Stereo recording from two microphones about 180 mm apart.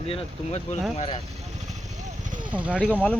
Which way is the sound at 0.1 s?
30° left (ahead or behind).